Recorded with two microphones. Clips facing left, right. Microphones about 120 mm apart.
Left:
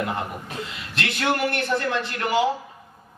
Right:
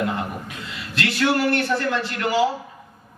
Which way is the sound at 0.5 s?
25° left (ahead or behind).